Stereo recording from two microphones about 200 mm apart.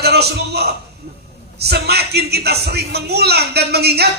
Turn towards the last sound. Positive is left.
turn(degrees=-55)  # may be behind; listen again after turning